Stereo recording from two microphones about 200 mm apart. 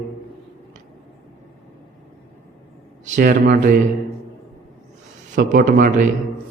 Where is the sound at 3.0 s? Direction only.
40° right (ahead or behind).